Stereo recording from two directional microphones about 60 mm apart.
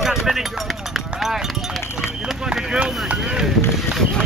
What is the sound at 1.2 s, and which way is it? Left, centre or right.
Speech, centre.